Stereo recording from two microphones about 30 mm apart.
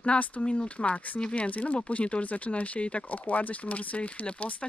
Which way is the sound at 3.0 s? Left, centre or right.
Left.